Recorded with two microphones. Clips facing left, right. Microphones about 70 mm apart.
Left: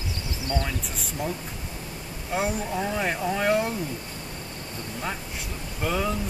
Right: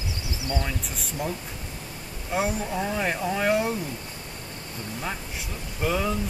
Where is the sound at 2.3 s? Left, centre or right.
Centre.